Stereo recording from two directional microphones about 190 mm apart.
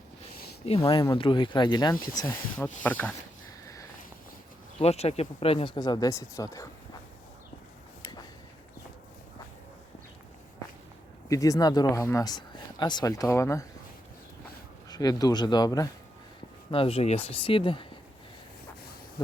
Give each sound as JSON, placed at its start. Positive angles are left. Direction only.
{"t": 0.6, "sound": "speech", "side_deg": 30}
{"t": 2.8, "sound": "speech", "side_deg": 10}
{"t": 4.8, "sound": "speech", "side_deg": 35}
{"t": 11.3, "sound": "speech", "side_deg": 15}
{"t": 14.8, "sound": "speech", "side_deg": 20}